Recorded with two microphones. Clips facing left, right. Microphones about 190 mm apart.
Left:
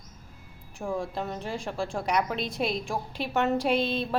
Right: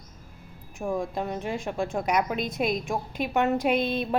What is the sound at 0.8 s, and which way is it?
Speech, 15° right (ahead or behind).